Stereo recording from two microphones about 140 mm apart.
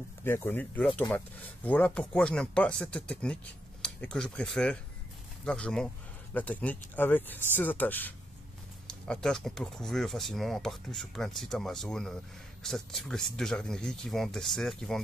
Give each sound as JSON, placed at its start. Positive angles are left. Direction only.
{"t": 0.2, "sound": "speech", "side_deg": 15}